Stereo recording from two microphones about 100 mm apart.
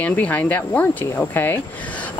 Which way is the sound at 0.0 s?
15° left (ahead or behind).